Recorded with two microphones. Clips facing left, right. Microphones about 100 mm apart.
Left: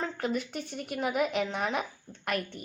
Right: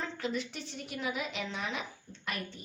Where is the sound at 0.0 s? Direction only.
50° left (ahead or behind).